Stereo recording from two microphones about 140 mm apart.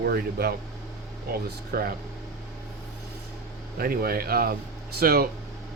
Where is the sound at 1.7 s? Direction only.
90° right.